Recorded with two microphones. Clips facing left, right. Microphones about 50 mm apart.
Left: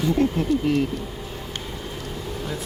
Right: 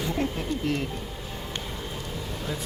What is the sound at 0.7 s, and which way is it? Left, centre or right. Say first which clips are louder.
Speech: left 5 dB; centre.